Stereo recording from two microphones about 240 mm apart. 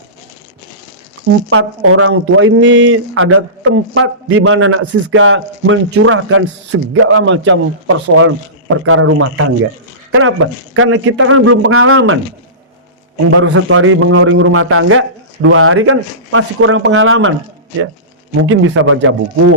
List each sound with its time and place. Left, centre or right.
1.5 s speech: right
13.3 s speech: right
18.3 s speech: right